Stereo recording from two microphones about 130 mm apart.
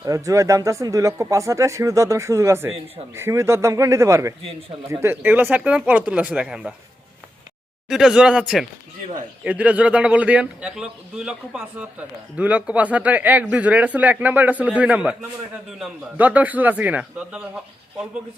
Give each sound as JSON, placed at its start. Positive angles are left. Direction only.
{"t": 0.0, "sound": "a man's voice", "side_deg": -25}
{"t": 7.9, "sound": "a man's voice", "side_deg": -5}
{"t": 16.1, "sound": "a man's voice", "side_deg": -10}